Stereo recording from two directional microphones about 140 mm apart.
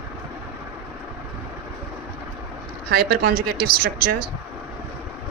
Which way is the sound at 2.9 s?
90° right.